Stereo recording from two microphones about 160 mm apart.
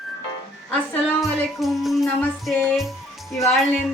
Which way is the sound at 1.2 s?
Centre (ahead or behind).